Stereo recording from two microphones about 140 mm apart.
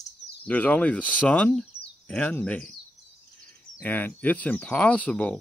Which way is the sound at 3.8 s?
10° left (ahead or behind).